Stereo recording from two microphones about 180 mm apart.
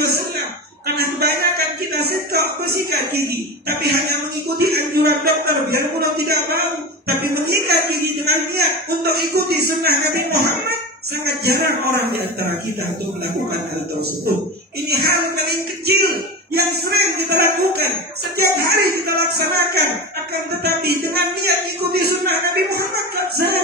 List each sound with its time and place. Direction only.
0.9 s speech: 60° right (ahead or behind)
14.9 s speech: 60° right (ahead or behind)
23.3 s speech: 60° right (ahead or behind)